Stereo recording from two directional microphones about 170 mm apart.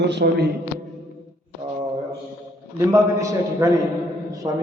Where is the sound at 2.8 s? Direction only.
20° right (ahead or behind).